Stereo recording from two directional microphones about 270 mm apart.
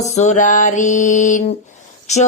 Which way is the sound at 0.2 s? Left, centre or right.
Left.